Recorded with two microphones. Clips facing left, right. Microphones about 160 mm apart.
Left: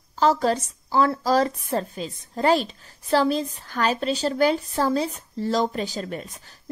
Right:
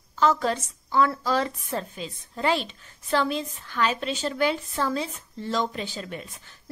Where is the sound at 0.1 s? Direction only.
35° left (ahead or behind).